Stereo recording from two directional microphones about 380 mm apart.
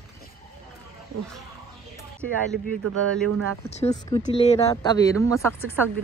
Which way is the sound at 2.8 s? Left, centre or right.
Right.